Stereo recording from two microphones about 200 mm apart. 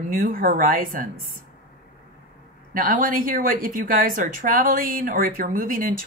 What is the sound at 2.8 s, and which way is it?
A woman's voice, 45° right (ahead or behind).